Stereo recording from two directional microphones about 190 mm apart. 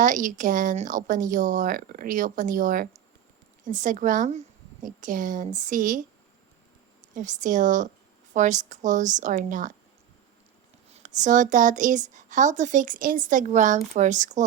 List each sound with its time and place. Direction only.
0.0 s speech: 40° right (ahead or behind)
7.1 s a woman's voice: 40° right (ahead or behind)
10.9 s a woman's voice: 40° right (ahead or behind)